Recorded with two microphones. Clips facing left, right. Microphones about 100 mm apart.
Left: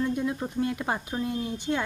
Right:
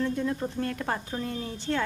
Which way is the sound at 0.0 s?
15° left (ahead or behind).